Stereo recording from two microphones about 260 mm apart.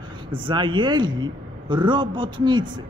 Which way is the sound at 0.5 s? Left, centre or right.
Centre.